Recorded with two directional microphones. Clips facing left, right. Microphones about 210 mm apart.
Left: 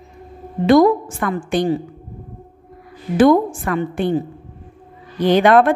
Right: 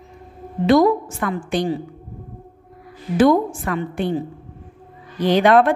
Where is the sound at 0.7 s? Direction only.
50° left (ahead or behind).